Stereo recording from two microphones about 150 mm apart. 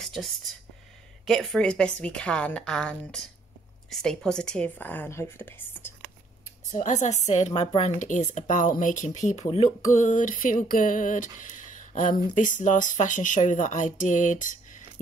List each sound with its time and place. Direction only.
0.0 s a sound: centre (ahead or behind)
1.2 s speech: centre (ahead or behind)
6.7 s speech: 55° left (ahead or behind)
7.5 s a woman's voice: 30° left (ahead or behind)
7.8 s speech: 55° left (ahead or behind)
9.9 s speech: 55° left (ahead or behind)